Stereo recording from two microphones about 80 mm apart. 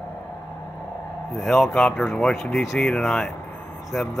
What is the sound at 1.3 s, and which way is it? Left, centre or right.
Speech, centre.